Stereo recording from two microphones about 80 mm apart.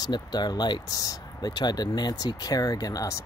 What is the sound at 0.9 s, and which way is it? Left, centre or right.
Speech, left.